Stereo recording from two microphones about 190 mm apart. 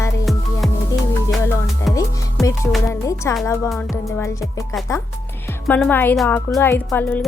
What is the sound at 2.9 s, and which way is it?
Speech, 15° left (ahead or behind).